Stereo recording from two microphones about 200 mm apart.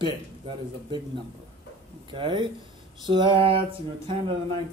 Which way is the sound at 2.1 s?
25° right (ahead or behind).